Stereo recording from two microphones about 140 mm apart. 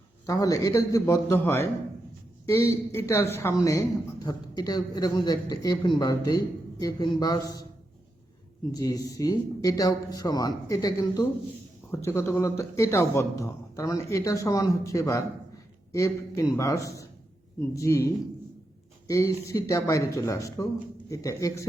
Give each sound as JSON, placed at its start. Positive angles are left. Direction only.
{"t": 0.3, "sound": "a man's voice", "side_deg": 25}
{"t": 8.7, "sound": "a man's voice", "side_deg": 25}